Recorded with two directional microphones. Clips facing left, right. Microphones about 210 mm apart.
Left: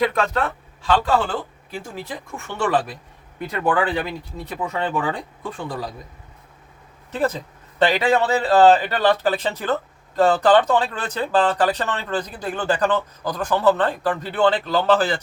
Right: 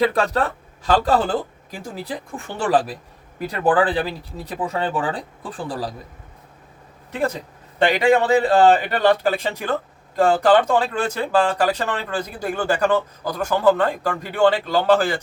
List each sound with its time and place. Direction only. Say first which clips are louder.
0.0 s speech: right 2 dB; 35° right (ahead or behind)
7.1 s speech: left 1 dB; 10° right (ahead or behind)